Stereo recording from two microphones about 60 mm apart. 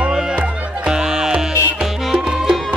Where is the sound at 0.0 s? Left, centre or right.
Centre.